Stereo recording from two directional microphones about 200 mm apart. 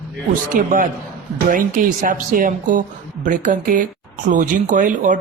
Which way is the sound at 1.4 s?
40° right (ahead or behind).